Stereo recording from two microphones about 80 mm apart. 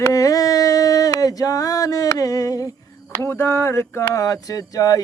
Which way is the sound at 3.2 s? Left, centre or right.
Left.